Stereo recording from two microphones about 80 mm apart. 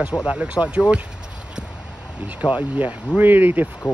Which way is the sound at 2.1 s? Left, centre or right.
Centre.